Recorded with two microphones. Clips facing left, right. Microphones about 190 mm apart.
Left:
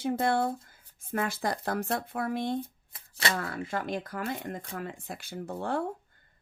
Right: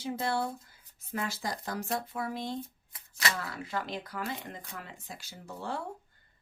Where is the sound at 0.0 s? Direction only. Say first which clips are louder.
Left 5 dB; 50° left (ahead or behind).